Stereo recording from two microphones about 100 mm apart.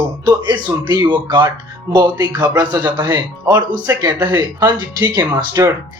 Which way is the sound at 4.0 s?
40° right (ahead or behind).